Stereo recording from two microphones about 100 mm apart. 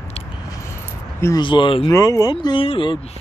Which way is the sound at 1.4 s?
55° left (ahead or behind).